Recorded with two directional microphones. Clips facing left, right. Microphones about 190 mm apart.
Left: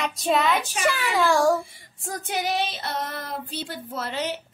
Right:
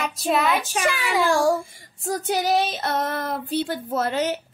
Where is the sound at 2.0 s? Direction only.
40° right (ahead or behind).